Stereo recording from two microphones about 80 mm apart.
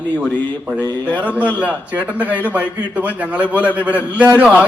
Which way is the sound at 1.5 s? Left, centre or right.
Right.